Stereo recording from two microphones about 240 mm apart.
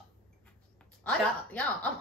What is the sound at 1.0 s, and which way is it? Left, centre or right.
Speech, centre.